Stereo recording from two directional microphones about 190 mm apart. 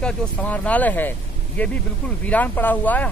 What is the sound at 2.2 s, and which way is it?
Speech, 10° left (ahead or behind).